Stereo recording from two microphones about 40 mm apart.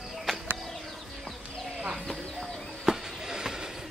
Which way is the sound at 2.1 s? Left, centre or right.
Centre.